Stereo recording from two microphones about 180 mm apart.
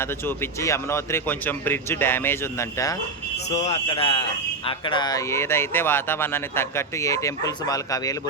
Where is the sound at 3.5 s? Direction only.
40° left (ahead or behind).